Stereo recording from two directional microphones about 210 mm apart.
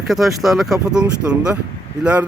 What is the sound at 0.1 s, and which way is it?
Speech, centre (ahead or behind).